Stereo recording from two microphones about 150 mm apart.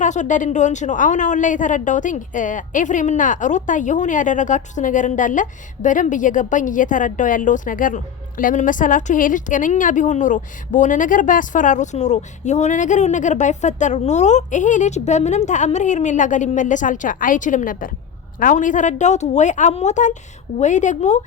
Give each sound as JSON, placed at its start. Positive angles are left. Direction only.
{"t": 0.0, "sound": "a woman's voice", "side_deg": 55}